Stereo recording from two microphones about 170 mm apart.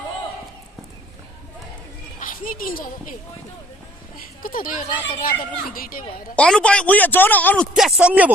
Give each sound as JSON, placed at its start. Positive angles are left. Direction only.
{"t": 2.2, "sound": "a child's voice", "side_deg": 55}
{"t": 4.4, "sound": "speech", "side_deg": 55}
{"t": 6.3, "sound": "a man's voice", "side_deg": 5}